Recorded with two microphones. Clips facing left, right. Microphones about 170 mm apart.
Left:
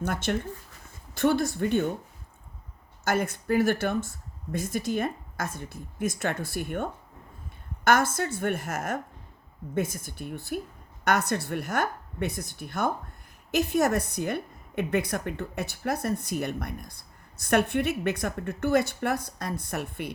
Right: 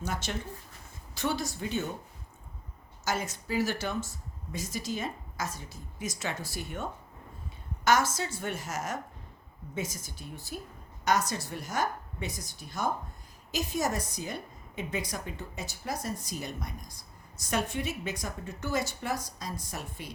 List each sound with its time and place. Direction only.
0.0 s a woman's voice: 55° left (ahead or behind)
3.0 s a woman's voice: 55° left (ahead or behind)